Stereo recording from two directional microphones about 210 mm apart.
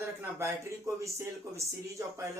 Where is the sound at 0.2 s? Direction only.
10° right (ahead or behind).